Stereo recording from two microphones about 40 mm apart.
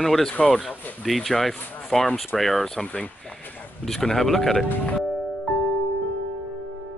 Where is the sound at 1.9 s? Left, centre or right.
Centre.